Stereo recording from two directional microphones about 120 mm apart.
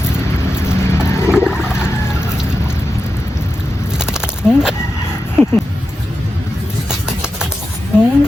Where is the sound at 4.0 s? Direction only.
5° right (ahead or behind).